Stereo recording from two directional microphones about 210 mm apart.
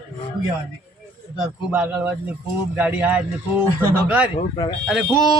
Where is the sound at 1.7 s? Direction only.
5° right (ahead or behind).